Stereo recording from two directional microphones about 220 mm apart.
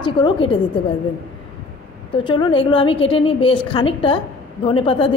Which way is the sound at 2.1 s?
20° left (ahead or behind).